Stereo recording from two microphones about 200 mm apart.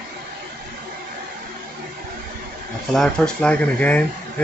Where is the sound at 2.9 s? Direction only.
5° left (ahead or behind).